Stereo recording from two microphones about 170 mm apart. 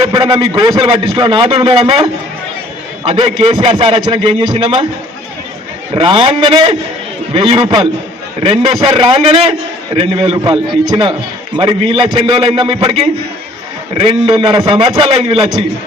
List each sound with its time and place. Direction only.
0.0 s a man's voice: 25° right (ahead or behind)
5.9 s a man's voice: 30° right (ahead or behind)